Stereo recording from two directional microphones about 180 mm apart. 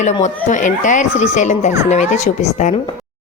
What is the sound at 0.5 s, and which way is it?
A woman's voice, 45° left (ahead or behind).